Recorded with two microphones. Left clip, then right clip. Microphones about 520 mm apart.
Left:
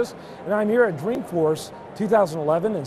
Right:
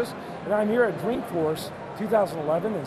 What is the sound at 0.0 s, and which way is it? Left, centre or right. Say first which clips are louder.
Speech: left 3 dB; left.